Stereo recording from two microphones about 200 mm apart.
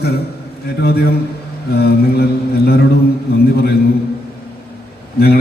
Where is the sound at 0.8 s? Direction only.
50° left (ahead or behind).